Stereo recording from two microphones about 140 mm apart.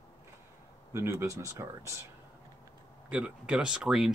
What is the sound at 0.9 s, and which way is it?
Speech, 20° right (ahead or behind).